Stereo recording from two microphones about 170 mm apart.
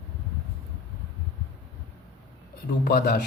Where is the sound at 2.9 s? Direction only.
65° left (ahead or behind).